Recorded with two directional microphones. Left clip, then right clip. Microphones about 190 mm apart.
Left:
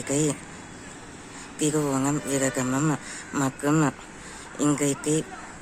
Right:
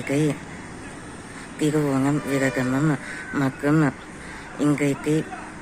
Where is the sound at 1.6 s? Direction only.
10° left (ahead or behind).